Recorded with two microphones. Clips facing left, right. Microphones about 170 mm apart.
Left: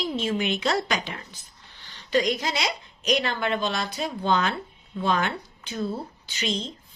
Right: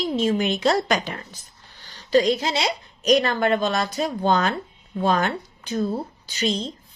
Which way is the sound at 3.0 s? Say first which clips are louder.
Right 6 dB; 40° right (ahead or behind).